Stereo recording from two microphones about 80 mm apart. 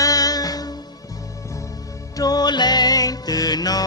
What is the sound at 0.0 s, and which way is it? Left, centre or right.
Music, left.